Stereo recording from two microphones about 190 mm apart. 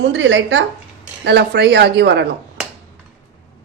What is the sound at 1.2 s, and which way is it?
Speech, 60° right (ahead or behind).